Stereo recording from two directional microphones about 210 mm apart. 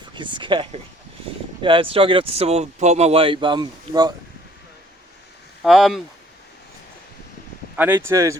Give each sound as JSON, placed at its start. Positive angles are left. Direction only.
{"t": 0.1, "sound": "speech", "side_deg": -20}
{"t": 5.6, "sound": "speech", "side_deg": 0}
{"t": 7.8, "sound": "speech", "side_deg": -10}